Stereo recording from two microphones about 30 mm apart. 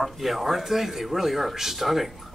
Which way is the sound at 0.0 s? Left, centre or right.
Centre.